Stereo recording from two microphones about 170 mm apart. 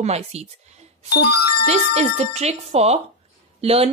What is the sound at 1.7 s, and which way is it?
A woman's voice, 40° right (ahead or behind).